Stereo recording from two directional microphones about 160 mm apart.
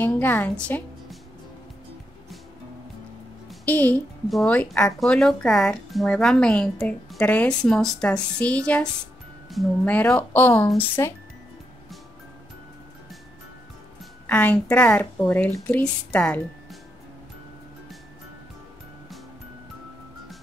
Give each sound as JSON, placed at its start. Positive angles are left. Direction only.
{"t": 0.0, "sound": "a woman's voice", "side_deg": 10}
{"t": 3.4, "sound": "a woman's voice", "side_deg": 10}
{"t": 14.2, "sound": "a woman's voice", "side_deg": 10}